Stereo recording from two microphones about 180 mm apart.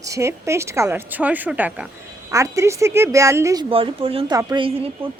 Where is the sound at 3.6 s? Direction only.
30° right (ahead or behind).